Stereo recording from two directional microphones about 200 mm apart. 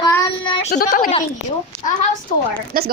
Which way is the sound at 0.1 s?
20° left (ahead or behind).